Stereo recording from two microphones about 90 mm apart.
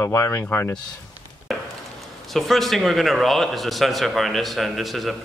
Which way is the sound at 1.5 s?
Centre (ahead or behind).